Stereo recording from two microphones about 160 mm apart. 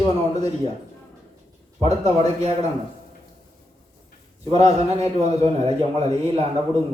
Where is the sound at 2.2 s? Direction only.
40° right (ahead or behind).